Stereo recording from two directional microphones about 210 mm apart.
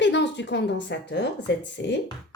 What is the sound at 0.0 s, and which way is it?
A woman's voice, 60° left (ahead or behind).